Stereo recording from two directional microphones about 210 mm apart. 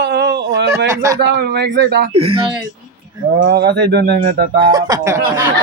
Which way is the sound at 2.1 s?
25° right (ahead or behind).